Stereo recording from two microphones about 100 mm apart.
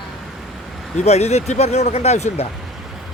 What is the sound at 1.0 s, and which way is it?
Speech, 90° left.